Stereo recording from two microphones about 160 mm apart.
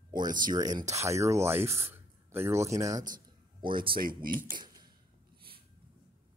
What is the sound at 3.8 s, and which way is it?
Speech, 65° right (ahead or behind).